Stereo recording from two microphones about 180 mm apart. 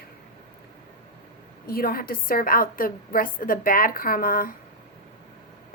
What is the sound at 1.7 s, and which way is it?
A woman's voice, 55° left (ahead or behind).